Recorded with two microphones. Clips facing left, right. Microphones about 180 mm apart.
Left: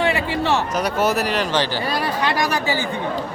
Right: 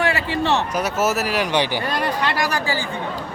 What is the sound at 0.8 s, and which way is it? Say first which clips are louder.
Speech: left 1 dB; 5° right (ahead or behind).